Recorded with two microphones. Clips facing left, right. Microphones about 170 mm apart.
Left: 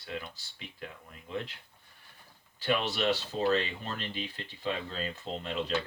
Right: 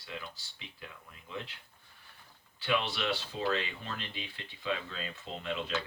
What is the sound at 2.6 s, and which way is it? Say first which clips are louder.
Speech: left 3 dB; 40° left (ahead or behind).